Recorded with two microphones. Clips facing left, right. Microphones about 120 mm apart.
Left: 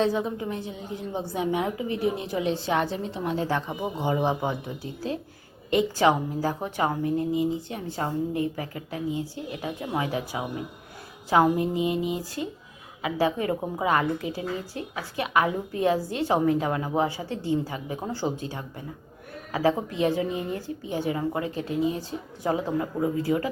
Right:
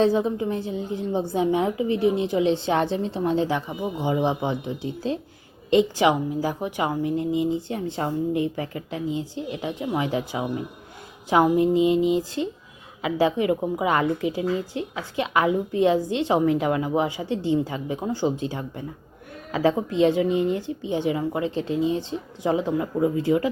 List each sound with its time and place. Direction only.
0.0 s a woman's voice: 30° right (ahead or behind)
3.9 s a woman's voice: 15° right (ahead or behind)